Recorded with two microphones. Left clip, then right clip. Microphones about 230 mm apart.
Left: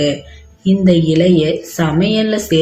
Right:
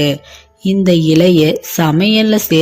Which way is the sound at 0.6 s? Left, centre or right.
Right.